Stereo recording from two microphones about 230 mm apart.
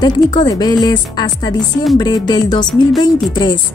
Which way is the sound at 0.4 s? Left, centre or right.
Centre.